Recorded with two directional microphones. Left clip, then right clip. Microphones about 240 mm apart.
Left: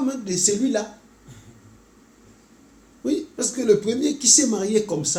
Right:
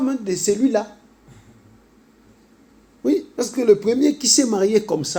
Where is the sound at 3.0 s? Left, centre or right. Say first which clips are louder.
Right 4 dB; right.